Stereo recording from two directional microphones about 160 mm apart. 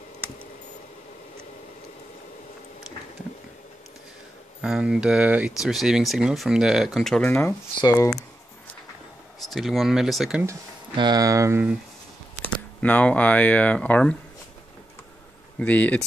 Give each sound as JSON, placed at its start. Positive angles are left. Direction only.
{"t": 4.6, "sound": "speech", "side_deg": -5}
{"t": 7.8, "sound": "speech", "side_deg": 20}
{"t": 9.4, "sound": "speech", "side_deg": 0}
{"t": 11.0, "sound": "speech", "side_deg": -25}
{"t": 12.4, "sound": "speech", "side_deg": 10}
{"t": 15.6, "sound": "speech", "side_deg": 10}